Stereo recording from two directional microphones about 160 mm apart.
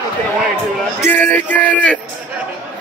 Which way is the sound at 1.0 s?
10° left (ahead or behind).